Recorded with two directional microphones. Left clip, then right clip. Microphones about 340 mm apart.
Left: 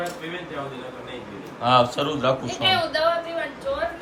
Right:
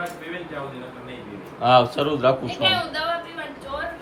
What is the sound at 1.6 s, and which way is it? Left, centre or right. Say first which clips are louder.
Speech: right 2 dB; centre.